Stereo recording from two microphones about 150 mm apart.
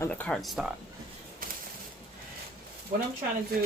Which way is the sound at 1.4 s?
70° right (ahead or behind).